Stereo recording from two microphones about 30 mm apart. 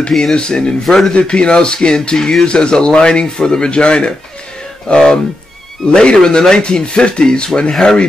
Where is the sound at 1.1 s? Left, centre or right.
Left.